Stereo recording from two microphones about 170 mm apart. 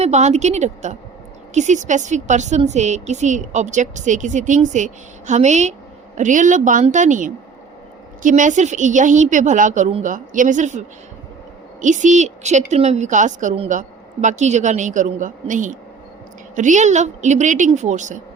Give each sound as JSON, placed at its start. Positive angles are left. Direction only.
{"t": 0.0, "sound": "a woman's voice", "side_deg": -40}